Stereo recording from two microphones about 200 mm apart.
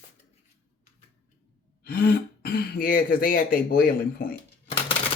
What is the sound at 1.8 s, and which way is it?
Speech, 50° left (ahead or behind).